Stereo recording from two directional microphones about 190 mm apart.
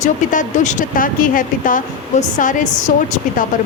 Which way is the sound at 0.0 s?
40° left (ahead or behind).